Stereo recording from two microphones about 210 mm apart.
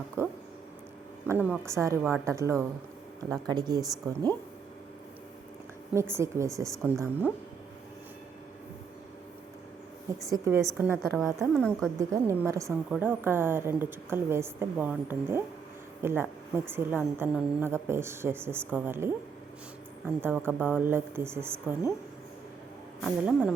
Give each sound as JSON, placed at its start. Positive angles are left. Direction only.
{"t": 0.2, "sound": "a sound", "side_deg": -10}
{"t": 1.3, "sound": "a woman's voice", "side_deg": -10}
{"t": 5.9, "sound": "a woman's voice", "side_deg": -10}
{"t": 10.2, "sound": "a woman's voice", "side_deg": -15}
{"t": 11.9, "sound": "a woman's voice", "side_deg": -15}
{"t": 23.0, "sound": "a woman's voice", "side_deg": -5}